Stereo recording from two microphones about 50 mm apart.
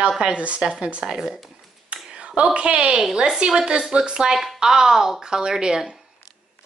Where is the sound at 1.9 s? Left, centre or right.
Right.